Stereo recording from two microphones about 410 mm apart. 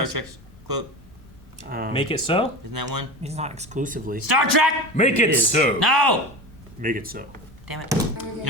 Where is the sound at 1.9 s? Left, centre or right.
Centre.